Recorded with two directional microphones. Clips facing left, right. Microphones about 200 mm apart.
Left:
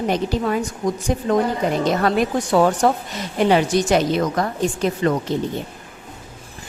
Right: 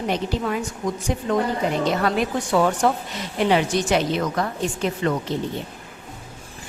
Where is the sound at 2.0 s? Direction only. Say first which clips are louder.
Left 3 dB; 40° left (ahead or behind).